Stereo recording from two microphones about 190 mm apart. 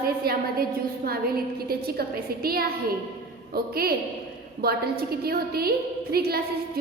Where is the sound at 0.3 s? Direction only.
55° right (ahead or behind).